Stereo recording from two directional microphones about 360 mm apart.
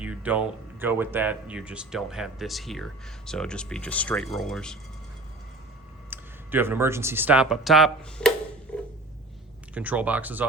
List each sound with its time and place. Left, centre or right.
0.0 s speech: centre
6.1 s speech: centre
8.7 s a sound: centre
9.7 s speech: centre